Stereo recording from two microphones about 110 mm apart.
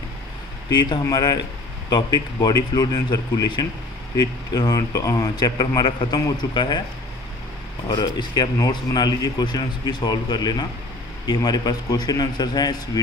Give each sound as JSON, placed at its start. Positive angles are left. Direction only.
{"t": 0.7, "sound": "speech", "side_deg": 40}
{"t": 7.9, "sound": "speech", "side_deg": 45}